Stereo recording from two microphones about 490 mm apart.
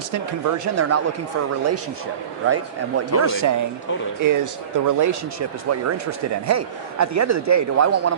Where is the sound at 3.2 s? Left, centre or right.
Right.